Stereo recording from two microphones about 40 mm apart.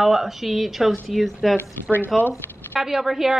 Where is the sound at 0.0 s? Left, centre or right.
Centre.